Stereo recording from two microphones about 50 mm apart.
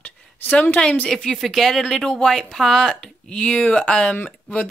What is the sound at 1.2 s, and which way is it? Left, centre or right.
Speech, centre.